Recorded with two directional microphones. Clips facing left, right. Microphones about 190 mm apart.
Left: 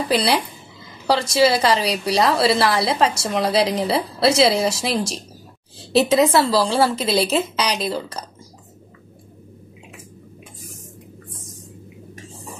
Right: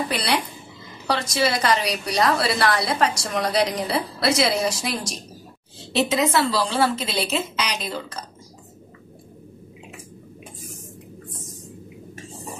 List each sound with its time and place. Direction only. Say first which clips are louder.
1.0 s a woman's voice: left 6 dB; 30° left (ahead or behind)